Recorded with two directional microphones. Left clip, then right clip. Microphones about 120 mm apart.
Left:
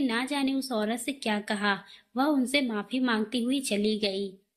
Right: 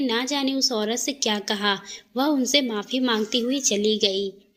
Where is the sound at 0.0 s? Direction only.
35° right (ahead or behind).